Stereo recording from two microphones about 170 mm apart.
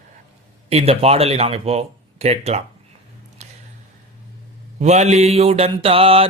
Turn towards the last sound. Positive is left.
turn(degrees=-35)  # may be behind; listen again after turning